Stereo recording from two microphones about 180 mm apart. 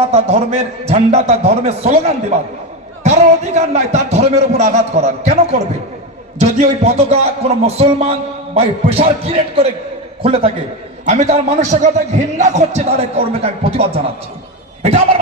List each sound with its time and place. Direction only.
0.1 s speech: 35° right (ahead or behind)
6.8 s speech: 35° right (ahead or behind)